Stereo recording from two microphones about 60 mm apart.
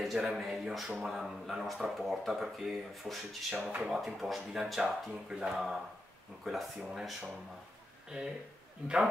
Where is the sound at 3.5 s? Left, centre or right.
Centre.